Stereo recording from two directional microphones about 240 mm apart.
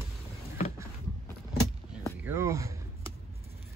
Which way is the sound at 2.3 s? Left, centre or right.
Centre.